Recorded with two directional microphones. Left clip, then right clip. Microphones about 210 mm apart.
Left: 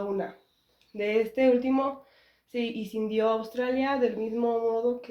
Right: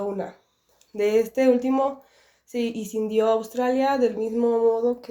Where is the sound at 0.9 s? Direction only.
40° right (ahead or behind).